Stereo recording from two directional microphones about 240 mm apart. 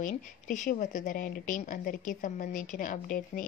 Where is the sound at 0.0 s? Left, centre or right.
Left.